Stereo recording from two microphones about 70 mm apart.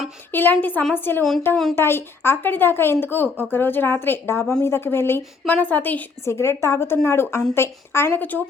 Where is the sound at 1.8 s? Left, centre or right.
Left.